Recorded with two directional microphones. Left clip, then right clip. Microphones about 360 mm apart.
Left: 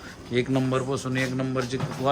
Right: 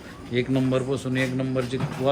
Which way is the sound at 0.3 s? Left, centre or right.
Centre.